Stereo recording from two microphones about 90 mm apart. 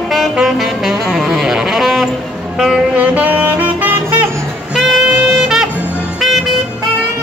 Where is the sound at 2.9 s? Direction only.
15° right (ahead or behind).